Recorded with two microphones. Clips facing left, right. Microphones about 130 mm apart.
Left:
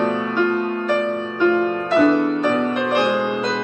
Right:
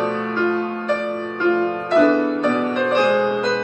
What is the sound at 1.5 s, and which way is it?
Music, 5° left (ahead or behind).